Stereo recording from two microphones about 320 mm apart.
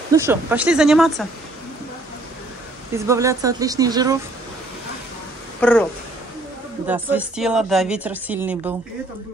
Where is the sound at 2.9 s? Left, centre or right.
Centre.